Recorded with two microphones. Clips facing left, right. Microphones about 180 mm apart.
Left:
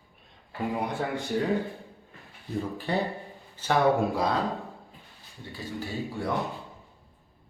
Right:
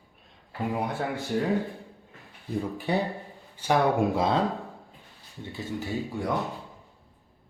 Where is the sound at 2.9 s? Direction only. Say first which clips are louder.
Right 2 dB; 10° right (ahead or behind).